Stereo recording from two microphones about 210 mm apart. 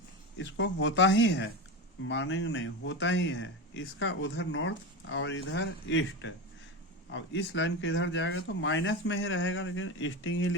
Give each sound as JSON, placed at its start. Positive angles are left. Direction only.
{"t": 0.3, "sound": "speech", "side_deg": 60}